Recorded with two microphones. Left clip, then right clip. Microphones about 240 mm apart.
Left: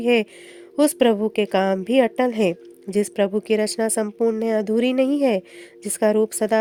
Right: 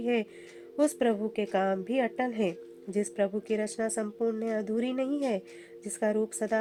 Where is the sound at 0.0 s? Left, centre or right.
Left.